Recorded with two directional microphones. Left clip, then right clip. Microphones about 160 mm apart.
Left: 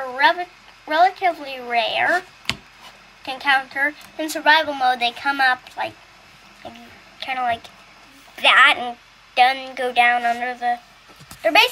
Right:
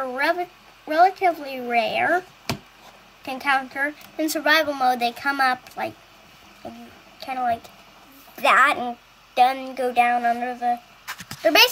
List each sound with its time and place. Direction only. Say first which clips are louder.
0.1 s a woman's voice: left 8 dB; 70° right (ahead or behind)
3.3 s a woman's voice: left 3 dB; 75° right (ahead or behind)
7.2 s a woman's voice: left 2 dB; 50° right (ahead or behind)
11.4 s a woman's voice: left 1 dB; 75° right (ahead or behind)